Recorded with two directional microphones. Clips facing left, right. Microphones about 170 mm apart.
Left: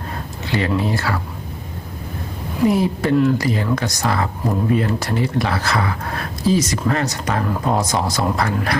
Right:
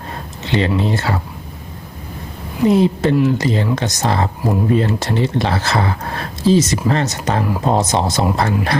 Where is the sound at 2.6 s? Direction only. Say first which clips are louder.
Right 4 dB; 25° right (ahead or behind).